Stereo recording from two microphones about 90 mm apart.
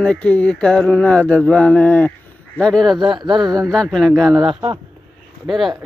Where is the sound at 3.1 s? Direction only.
60° right (ahead or behind).